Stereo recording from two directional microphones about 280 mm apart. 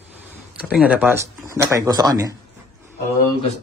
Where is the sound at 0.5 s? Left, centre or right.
Centre.